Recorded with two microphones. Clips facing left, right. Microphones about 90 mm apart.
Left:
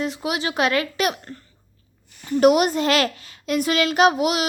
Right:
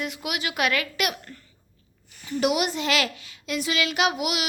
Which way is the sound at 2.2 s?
45° left (ahead or behind).